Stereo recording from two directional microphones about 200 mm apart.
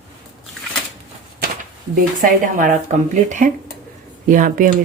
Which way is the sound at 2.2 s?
40° right (ahead or behind).